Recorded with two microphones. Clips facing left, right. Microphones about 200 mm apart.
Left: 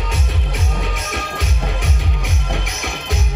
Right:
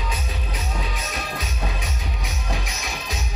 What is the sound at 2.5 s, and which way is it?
Music, 65° left (ahead or behind).